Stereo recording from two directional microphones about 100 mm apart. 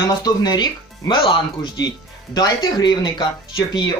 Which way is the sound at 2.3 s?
45° left (ahead or behind).